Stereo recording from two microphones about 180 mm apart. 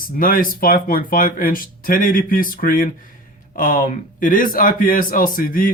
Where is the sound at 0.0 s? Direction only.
50° left (ahead or behind).